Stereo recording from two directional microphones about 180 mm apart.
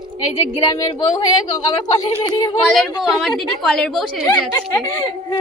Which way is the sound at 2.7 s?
Centre (ahead or behind).